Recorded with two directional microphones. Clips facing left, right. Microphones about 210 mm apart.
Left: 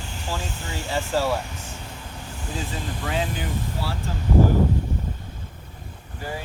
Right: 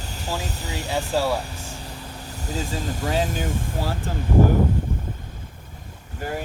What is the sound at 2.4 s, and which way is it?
Speech, 40° right (ahead or behind).